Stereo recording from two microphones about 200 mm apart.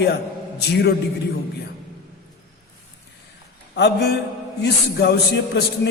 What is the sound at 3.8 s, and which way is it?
A man's voice, 55° left (ahead or behind).